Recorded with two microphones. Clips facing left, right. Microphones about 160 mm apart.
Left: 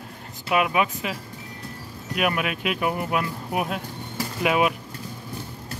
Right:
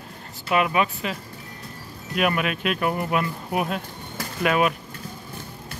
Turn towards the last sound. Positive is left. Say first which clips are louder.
# even
turn(degrees=10)  # may be behind; listen again after turning